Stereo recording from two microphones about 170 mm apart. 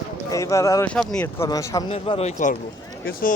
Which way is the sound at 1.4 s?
20° left (ahead or behind).